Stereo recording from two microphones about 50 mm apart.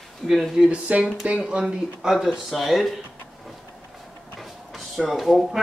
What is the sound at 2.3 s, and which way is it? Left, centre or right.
Speech, centre.